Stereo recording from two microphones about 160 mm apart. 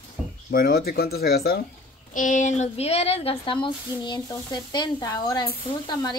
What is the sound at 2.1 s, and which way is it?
A woman's voice, 55° left (ahead or behind).